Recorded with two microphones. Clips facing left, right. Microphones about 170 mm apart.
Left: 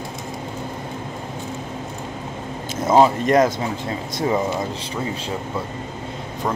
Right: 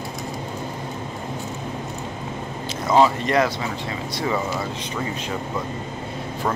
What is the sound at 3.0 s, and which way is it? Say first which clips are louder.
Speech: left 3 dB; 45° left (ahead or behind).